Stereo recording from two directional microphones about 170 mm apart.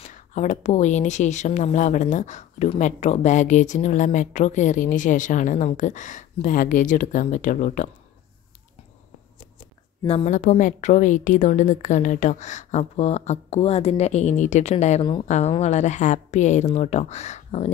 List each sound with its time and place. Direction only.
0.0 s speech: 45° left (ahead or behind)
10.0 s a woman's voice: 35° left (ahead or behind)